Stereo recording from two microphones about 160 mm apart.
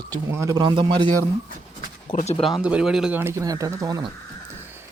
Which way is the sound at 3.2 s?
15° right (ahead or behind).